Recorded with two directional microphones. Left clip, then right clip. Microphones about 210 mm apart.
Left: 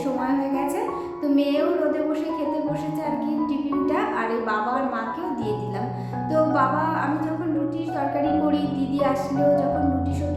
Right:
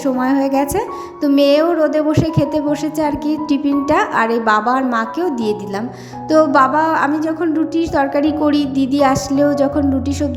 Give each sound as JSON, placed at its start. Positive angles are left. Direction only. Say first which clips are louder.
{"t": 0.2, "sound": "speech", "louder": "right 10 dB", "side_deg": -45}
{"t": 3.8, "sound": "speech", "louder": "right 10 dB", "side_deg": -50}